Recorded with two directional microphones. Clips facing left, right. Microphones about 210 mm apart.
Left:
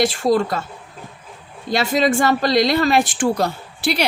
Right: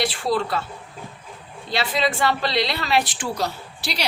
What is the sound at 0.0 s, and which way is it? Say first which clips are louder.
Speech: left 6 dB; 45° left (ahead or behind).